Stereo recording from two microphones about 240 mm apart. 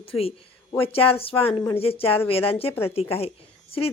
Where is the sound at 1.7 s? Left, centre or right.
Left.